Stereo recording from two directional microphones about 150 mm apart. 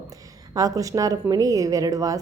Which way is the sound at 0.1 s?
25° right (ahead or behind).